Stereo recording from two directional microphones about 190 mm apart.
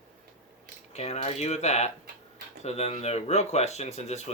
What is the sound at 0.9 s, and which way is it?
Speech, 35° left (ahead or behind).